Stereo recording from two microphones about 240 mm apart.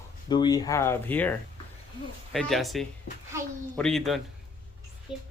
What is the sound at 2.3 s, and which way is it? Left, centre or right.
Speech, centre.